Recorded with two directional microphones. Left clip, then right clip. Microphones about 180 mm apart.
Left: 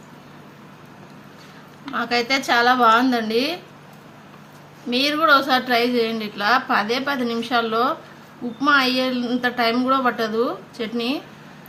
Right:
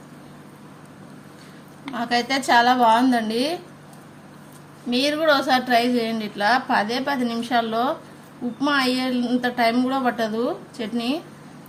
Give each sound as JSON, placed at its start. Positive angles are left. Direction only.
{"t": 1.9, "sound": "a woman's voice", "side_deg": -25}
{"t": 4.9, "sound": "a woman's voice", "side_deg": -25}